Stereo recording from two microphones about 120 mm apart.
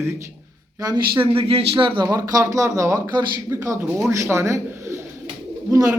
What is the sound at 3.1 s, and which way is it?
Speech, 35° right (ahead or behind).